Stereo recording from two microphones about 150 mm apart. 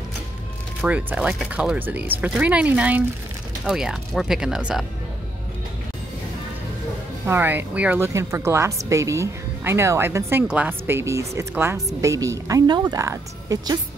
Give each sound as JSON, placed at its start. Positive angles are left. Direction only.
{"t": 0.7, "sound": "speech", "side_deg": -10}
{"t": 7.2, "sound": "a woman's voice", "side_deg": -15}